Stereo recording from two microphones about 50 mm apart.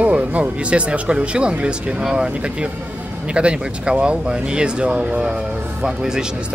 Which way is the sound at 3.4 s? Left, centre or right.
Right.